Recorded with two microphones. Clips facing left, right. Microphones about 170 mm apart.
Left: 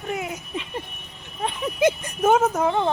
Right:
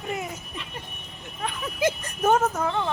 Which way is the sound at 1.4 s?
25° left (ahead or behind).